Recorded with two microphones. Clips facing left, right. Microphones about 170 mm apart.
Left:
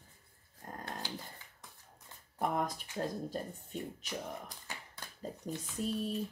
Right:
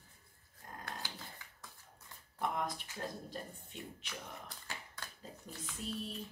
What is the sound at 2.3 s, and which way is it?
Speech, 45° left (ahead or behind).